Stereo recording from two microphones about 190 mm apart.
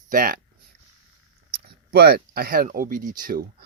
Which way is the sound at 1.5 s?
55° right (ahead or behind).